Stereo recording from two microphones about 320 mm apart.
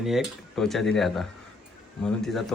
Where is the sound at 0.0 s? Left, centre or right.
Centre.